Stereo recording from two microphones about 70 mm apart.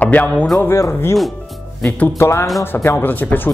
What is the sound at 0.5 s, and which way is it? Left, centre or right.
Speech, left.